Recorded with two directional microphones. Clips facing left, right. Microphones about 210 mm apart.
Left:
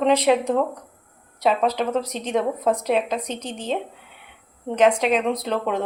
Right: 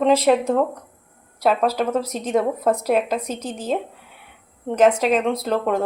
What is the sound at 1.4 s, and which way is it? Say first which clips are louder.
A woman's voice: right 1 dB; 5° right (ahead or behind).